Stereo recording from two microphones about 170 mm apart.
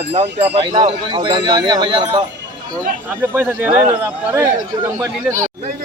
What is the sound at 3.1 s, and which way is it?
Speech, 10° right (ahead or behind).